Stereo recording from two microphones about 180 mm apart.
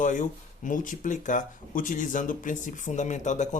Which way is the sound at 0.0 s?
45° left (ahead or behind).